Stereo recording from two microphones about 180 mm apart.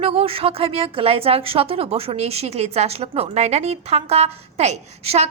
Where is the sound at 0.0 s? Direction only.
30° right (ahead or behind).